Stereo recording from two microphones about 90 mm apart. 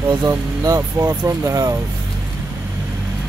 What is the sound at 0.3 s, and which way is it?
Speech, 35° right (ahead or behind).